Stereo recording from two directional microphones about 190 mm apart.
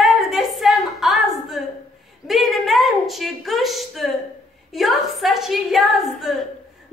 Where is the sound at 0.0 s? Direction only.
Centre (ahead or behind).